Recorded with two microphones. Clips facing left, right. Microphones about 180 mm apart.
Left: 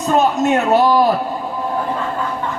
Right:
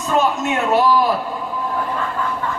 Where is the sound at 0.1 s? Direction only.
40° left (ahead or behind).